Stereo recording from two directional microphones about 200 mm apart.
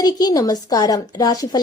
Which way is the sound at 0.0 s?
20° left (ahead or behind).